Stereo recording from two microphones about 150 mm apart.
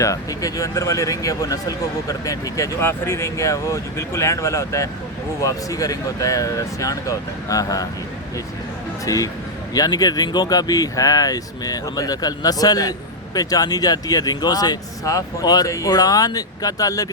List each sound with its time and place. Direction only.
0.0 s speech: 20° left (ahead or behind)
9.0 s speech: 25° left (ahead or behind)